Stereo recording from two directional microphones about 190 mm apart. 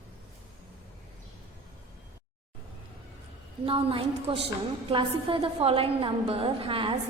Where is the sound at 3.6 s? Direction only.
30° right (ahead or behind).